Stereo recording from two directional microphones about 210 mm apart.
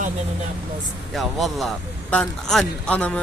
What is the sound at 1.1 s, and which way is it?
A man's voice, centre (ahead or behind).